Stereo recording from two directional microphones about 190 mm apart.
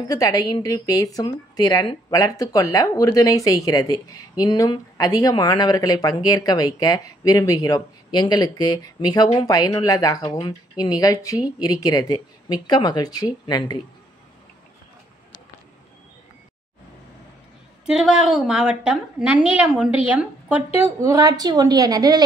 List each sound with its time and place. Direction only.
0.1 s speech: 20° left (ahead or behind)
17.8 s a woman's voice: 5° right (ahead or behind); by 22.2 s 20° right (ahead or behind)